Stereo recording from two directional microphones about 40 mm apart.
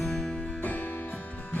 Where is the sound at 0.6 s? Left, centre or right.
Left.